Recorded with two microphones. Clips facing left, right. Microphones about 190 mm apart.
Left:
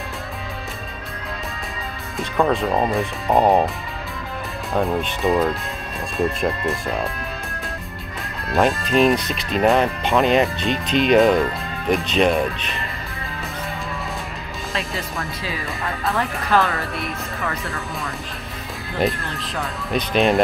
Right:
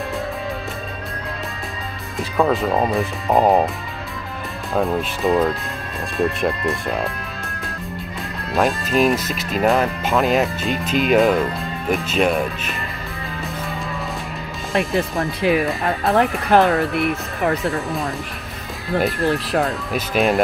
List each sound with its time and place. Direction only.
2.1 s speech: centre (ahead or behind)
4.7 s speech: centre (ahead or behind)
8.5 s speech: centre (ahead or behind)
15.0 s speech: 60° right (ahead or behind)
16.4 s speech: 15° right (ahead or behind)
16.9 s speech: 60° right (ahead or behind)
18.9 s speech: 55° right (ahead or behind)
19.9 s speech: 5° right (ahead or behind)